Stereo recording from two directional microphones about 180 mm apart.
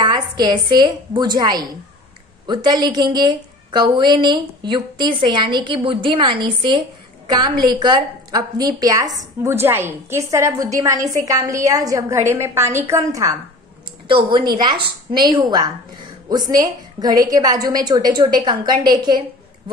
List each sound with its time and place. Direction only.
0.0 s a woman's voice: 20° right (ahead or behind)
14.0 s a woman's voice: 30° right (ahead or behind)